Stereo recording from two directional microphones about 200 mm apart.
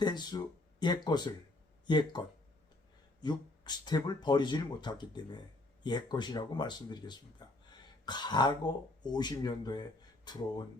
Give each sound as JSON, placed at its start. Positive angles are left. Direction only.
{"t": 0.0, "sound": "speech", "side_deg": 20}